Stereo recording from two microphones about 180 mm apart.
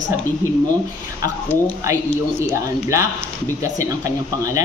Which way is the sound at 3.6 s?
45° left (ahead or behind).